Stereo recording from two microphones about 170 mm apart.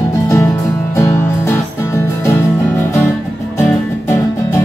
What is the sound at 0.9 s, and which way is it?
Music, 15° left (ahead or behind).